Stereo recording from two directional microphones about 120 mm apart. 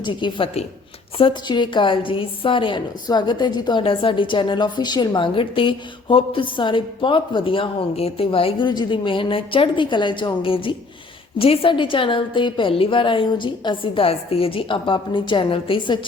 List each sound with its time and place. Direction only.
0.0 s a woman's voice: 40° left (ahead or behind)